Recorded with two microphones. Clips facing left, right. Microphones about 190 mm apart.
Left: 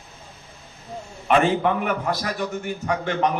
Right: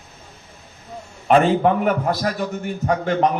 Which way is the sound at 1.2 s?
40° right (ahead or behind).